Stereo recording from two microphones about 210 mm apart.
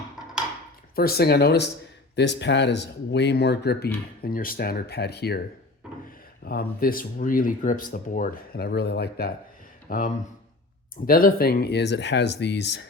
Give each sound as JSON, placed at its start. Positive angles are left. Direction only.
{"t": 0.9, "sound": "speech", "side_deg": 45}
{"t": 6.4, "sound": "speech", "side_deg": 50}